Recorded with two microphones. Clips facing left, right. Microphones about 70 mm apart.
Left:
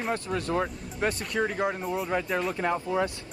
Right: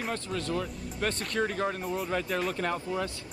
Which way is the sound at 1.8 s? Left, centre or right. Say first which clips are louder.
Left 2 dB; centre.